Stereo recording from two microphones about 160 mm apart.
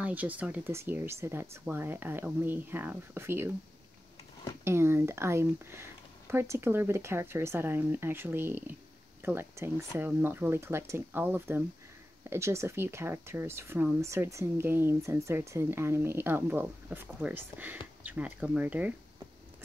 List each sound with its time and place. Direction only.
0.0 s speech: 10° right (ahead or behind)
4.6 s speech: 15° right (ahead or behind)